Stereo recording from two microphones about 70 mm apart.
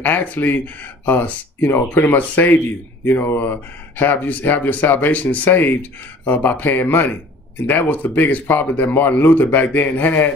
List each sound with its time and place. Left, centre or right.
0.0 s speech: left